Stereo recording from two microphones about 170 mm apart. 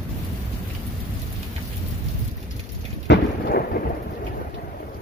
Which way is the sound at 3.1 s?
70° left (ahead or behind).